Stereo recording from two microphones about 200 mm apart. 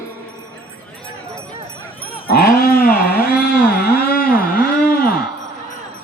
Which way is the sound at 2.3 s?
50° left (ahead or behind).